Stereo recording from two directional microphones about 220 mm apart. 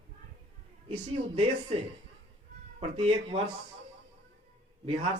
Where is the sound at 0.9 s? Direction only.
25° right (ahead or behind).